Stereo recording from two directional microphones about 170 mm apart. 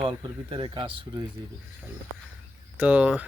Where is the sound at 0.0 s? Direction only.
30° right (ahead or behind).